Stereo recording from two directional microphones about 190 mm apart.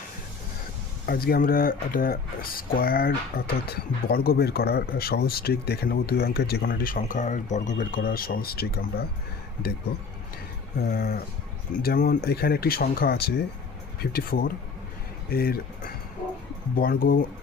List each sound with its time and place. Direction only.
1.0 s speech: 55° left (ahead or behind)
10.8 s speech: 55° left (ahead or behind)